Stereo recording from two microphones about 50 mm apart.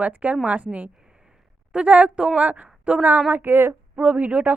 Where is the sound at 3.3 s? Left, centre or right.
Right.